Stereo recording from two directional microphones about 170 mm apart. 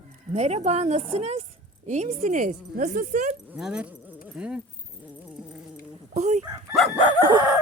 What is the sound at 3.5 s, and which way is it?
Speech, 5° right (ahead or behind).